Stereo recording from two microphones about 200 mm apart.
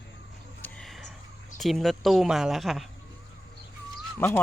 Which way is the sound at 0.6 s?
Centre (ahead or behind).